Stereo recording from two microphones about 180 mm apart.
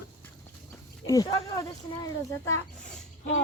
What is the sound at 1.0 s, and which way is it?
Speech, 20° left (ahead or behind).